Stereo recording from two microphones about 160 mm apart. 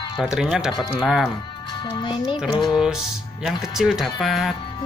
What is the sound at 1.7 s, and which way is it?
Speech, 30° left (ahead or behind).